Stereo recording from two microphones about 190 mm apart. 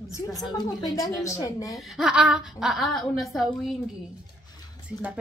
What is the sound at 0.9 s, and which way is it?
Speech, 15° left (ahead or behind).